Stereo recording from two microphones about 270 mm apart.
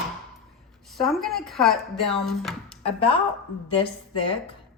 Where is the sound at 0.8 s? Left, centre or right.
Centre.